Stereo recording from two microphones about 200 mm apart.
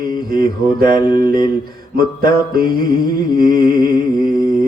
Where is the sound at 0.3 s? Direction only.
50° right (ahead or behind).